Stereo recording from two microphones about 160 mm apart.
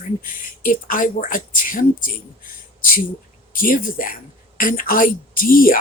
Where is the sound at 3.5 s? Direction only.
60° left (ahead or behind).